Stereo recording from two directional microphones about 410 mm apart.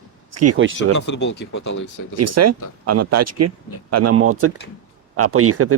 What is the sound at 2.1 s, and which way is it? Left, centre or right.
Speech, right.